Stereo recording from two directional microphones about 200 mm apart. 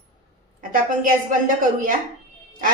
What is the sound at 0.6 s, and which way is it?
A woman's voice, 45° right (ahead or behind).